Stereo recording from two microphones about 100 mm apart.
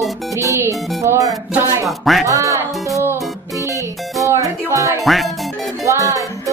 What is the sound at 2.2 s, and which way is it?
Music, 30° right (ahead or behind).